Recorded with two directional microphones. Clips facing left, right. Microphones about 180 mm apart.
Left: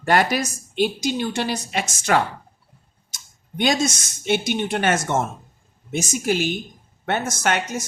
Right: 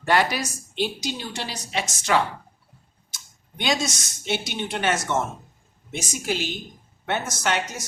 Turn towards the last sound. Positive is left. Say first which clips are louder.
# left 3 dB
turn(degrees=50)  # may be behind; listen again after turning